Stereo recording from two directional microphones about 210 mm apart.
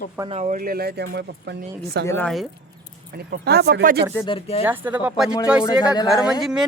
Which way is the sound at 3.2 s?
50° right (ahead or behind).